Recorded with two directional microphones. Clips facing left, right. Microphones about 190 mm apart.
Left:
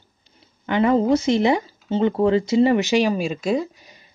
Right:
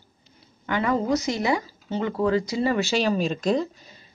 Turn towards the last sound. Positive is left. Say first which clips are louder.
# left 1 dB
turn(degrees=5)  # may be behind; listen again after turning